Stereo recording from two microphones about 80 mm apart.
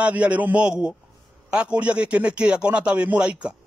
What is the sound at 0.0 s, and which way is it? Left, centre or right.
A man's voice, centre.